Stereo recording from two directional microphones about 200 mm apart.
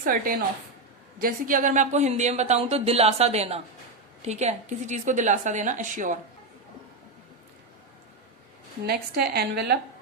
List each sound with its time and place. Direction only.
0.0 s a woman's voice: 45° right (ahead or behind)
8.9 s a woman's voice: 55° right (ahead or behind)